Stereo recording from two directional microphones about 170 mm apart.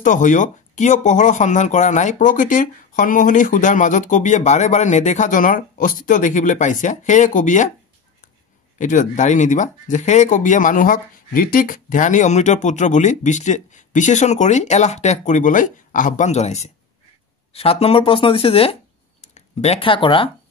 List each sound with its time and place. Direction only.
0.0 s speech: 50° left (ahead or behind)
8.7 s speech: 45° left (ahead or behind); by 20.2 s 30° left (ahead or behind)